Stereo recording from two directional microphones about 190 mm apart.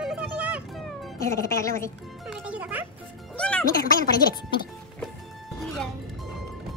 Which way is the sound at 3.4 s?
5° left (ahead or behind).